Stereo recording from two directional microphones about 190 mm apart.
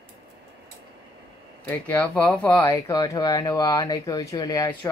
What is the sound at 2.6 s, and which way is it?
Speech, 20° left (ahead or behind).